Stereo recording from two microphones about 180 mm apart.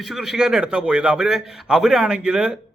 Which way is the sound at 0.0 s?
Centre (ahead or behind).